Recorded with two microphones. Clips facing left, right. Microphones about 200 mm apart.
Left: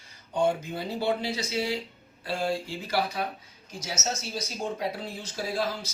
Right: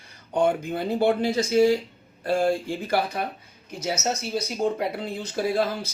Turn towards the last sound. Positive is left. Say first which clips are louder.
# right 6 dB
turn(degrees=-55)  # may be behind; listen again after turning